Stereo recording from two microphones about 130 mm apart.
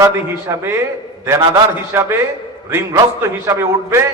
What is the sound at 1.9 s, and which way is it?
A man's voice, 20° right (ahead or behind).